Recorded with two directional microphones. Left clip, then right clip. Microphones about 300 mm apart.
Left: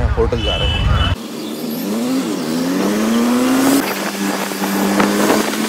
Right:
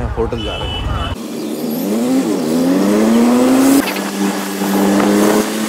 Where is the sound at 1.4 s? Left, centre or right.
Centre.